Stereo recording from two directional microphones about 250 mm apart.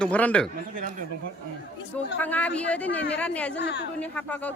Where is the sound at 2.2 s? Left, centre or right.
Centre.